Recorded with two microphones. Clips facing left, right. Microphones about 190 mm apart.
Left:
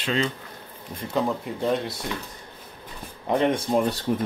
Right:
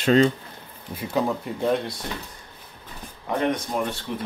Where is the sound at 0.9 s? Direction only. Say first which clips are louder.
Right 1 dB; 5° right (ahead or behind).